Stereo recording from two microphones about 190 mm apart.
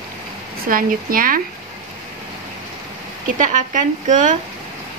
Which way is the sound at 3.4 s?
40° right (ahead or behind).